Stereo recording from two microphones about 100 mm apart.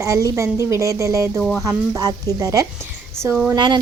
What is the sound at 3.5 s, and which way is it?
Speech, 50° right (ahead or behind).